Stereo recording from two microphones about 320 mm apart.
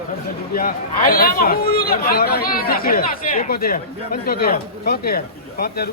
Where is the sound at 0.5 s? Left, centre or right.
Left.